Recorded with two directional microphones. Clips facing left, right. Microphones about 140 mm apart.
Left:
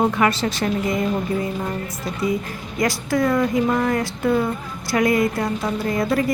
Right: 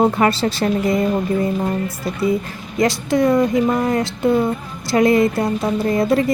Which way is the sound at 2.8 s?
25° right (ahead or behind).